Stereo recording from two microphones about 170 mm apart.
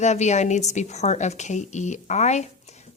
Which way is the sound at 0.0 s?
40° left (ahead or behind).